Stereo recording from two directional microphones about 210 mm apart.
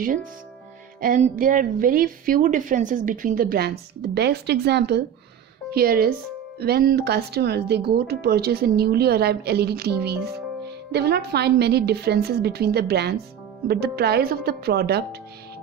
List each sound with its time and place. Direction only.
1.0 s a woman's voice: 40° right (ahead or behind)